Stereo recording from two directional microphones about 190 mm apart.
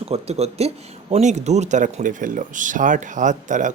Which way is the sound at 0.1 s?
35° right (ahead or behind).